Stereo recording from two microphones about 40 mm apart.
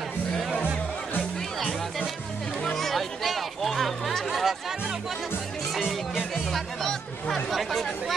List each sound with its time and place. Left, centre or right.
2.6 s chatter: centre
4.3 s music: centre
6.5 s chatter: centre